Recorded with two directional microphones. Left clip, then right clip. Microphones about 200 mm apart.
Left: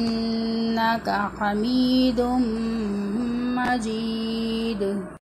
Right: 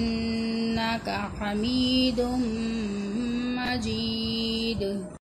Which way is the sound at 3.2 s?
5° right (ahead or behind).